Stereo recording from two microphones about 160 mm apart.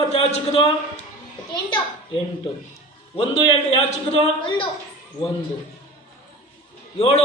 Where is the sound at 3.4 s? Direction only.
30° left (ahead or behind).